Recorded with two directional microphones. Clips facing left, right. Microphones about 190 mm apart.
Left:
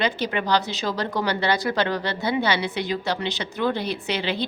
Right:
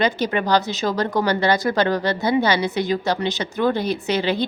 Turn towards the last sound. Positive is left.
turn(degrees=-45)  # may be behind; listen again after turning